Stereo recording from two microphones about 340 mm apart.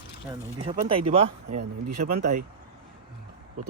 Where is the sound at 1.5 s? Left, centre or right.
Right.